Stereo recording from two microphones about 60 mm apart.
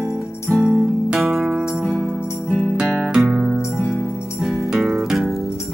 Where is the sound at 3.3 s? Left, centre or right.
Centre.